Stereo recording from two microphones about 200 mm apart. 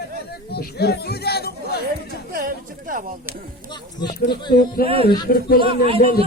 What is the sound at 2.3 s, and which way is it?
Speech, 45° right (ahead or behind).